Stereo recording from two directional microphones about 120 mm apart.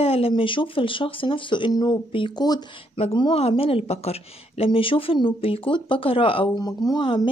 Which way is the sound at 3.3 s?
55° left (ahead or behind).